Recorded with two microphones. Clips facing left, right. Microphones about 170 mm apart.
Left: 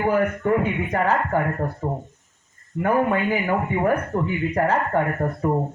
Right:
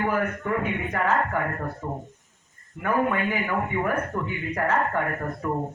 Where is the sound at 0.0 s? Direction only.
35° left (ahead or behind).